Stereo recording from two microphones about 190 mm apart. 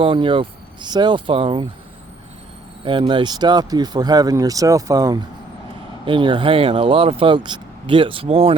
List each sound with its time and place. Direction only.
0.0 s speech: 25° right (ahead or behind)
2.8 s speech: 25° right (ahead or behind)